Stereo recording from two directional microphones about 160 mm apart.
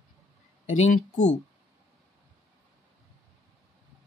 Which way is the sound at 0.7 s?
50° left (ahead or behind).